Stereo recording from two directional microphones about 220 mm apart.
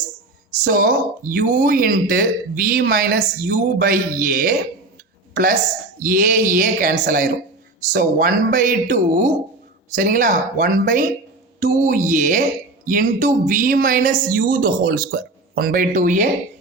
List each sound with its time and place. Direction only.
0.6 s a woman's voice: 40° right (ahead or behind)